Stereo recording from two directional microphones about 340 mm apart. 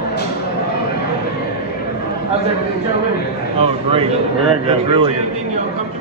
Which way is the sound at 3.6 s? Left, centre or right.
Centre.